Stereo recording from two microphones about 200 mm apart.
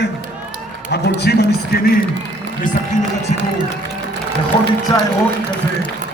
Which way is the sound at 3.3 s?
35° left (ahead or behind).